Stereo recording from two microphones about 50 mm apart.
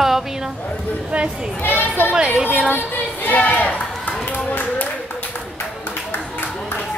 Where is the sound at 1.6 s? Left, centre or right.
Left.